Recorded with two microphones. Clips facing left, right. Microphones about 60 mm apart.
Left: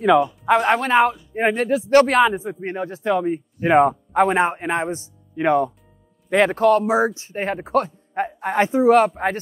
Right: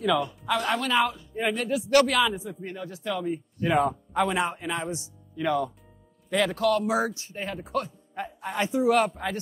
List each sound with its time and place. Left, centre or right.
0.0 s a man's voice: left
7.3 s a man's voice: left
8.6 s a man's voice: left